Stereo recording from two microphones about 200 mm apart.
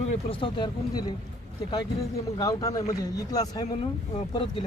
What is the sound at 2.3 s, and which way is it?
Speech, 20° left (ahead or behind).